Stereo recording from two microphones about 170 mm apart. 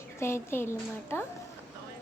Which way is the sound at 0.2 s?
15° left (ahead or behind).